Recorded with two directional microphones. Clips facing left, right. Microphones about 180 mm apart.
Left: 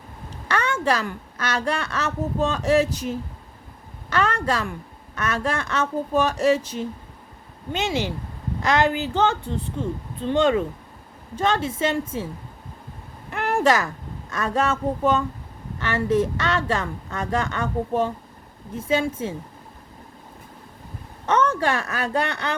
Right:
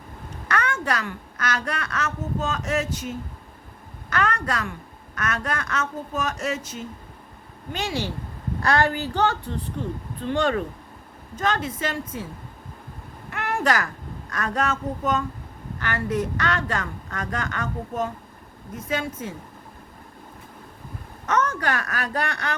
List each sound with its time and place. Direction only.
0.4 s a woman's voice: 30° left (ahead or behind)
7.7 s a woman's voice: 20° left (ahead or behind)
13.3 s a sound: 25° left (ahead or behind)
14.3 s a woman's voice: 25° left (ahead or behind)
21.2 s a woman's voice: 30° left (ahead or behind)